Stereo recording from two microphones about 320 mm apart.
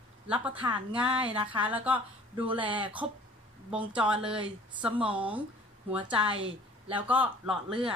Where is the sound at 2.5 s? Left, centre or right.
Centre.